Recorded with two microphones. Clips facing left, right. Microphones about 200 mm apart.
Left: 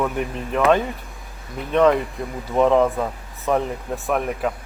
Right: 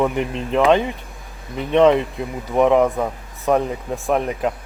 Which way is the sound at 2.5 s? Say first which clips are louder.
Right 1 dB; 15° right (ahead or behind).